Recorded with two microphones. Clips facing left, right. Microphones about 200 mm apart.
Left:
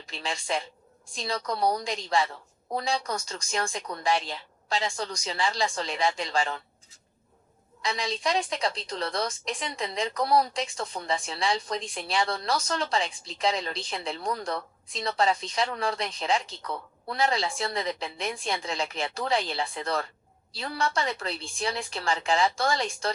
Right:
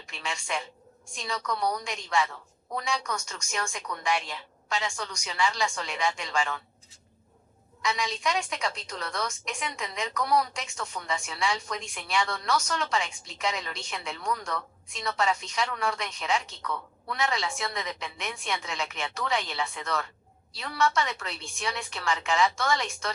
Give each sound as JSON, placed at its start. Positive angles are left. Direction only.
{"t": 0.0, "sound": "a woman's voice", "side_deg": 35}
{"t": 7.8, "sound": "a woman's voice", "side_deg": 35}